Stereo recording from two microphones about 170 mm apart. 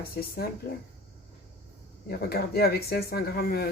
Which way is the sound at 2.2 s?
65° left (ahead or behind).